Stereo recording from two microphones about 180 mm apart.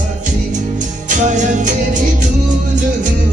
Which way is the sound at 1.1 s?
45° right (ahead or behind).